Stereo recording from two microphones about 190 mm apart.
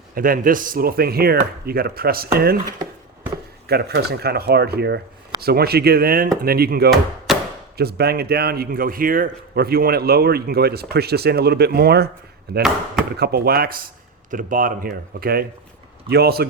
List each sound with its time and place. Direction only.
0.1 s speech: 50° right (ahead or behind)
3.7 s speech: 55° right (ahead or behind)
7.3 s chopping: centre (ahead or behind)
7.8 s speech: 55° right (ahead or behind)